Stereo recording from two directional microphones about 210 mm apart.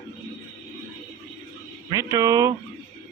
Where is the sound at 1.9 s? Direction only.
15° right (ahead or behind).